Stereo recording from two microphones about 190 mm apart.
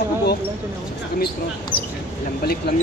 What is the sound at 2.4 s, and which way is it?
Speech, 55° left (ahead or behind).